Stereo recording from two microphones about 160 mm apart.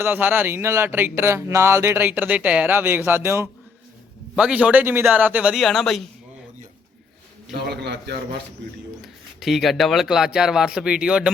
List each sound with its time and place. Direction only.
0.0 s speech: 10° right (ahead or behind)
7.5 s a man's voice: 90° right
9.0 s speech: centre (ahead or behind)